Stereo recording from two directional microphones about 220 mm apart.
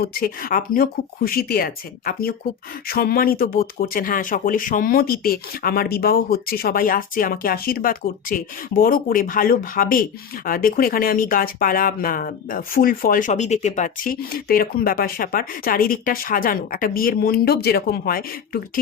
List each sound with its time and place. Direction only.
0.0 s speech: 40° left (ahead or behind)